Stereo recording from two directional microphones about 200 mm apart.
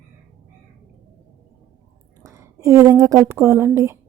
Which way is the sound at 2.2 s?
15° right (ahead or behind).